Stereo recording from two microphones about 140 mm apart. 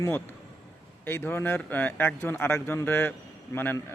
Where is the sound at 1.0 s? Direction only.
15° left (ahead or behind).